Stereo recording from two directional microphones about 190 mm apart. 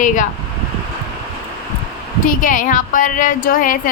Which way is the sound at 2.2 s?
45° left (ahead or behind).